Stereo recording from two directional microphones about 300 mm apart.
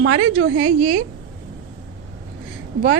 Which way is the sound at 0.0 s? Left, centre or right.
Right.